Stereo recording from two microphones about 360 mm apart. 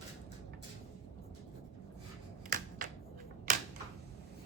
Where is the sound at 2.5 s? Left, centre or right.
Right.